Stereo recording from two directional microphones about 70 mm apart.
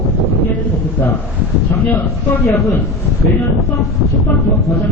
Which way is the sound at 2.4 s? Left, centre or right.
Left.